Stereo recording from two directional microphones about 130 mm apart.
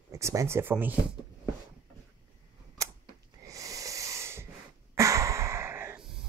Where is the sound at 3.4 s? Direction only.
25° right (ahead or behind).